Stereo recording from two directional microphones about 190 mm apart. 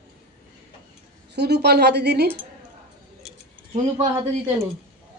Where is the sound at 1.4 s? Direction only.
60° right (ahead or behind).